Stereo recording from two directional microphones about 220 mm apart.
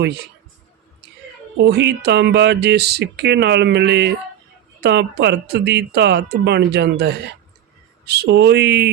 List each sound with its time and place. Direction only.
1.5 s speech: 50° right (ahead or behind)